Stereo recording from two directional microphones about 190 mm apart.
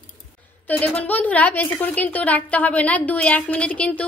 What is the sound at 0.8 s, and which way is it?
A woman's voice, 10° left (ahead or behind).